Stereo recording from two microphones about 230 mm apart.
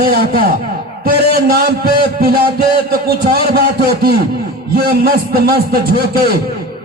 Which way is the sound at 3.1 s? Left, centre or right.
Right.